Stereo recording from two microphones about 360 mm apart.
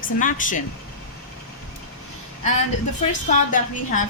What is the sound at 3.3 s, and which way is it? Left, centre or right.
Speech, left.